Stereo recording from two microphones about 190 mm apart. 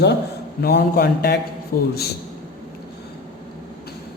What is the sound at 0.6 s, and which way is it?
A man's voice, 55° left (ahead or behind).